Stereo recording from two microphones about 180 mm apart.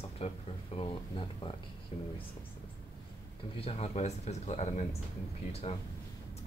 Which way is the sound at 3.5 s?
35° left (ahead or behind).